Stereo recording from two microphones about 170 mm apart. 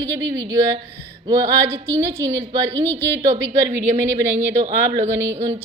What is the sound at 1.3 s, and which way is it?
Speech, 15° right (ahead or behind).